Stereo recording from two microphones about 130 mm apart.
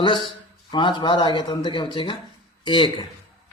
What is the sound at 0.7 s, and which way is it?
Speech, 40° left (ahead or behind).